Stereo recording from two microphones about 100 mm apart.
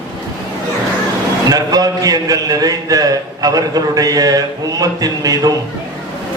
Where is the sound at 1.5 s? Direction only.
40° right (ahead or behind).